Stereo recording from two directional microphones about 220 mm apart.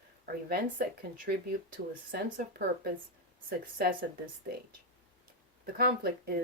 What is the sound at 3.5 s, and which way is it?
Speech, 40° right (ahead or behind).